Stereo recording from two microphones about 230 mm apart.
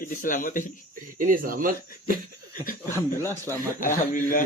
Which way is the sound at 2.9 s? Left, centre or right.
Centre.